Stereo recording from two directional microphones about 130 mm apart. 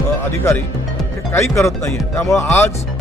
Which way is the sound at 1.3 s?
20° left (ahead or behind).